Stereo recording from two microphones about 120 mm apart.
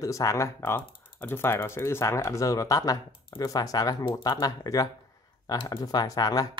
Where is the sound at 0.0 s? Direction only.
25° left (ahead or behind).